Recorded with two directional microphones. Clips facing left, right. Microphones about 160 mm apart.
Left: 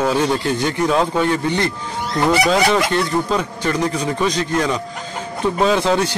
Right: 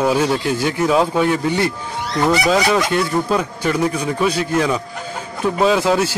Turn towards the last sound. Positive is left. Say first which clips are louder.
# right 1 dB
turn(degrees=-5)  # may be behind; listen again after turning